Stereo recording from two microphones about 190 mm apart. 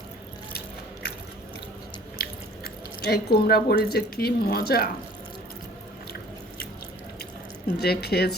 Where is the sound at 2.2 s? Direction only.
55° left (ahead or behind).